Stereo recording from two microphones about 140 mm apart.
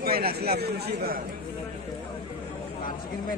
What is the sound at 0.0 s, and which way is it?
Speech, 90° right.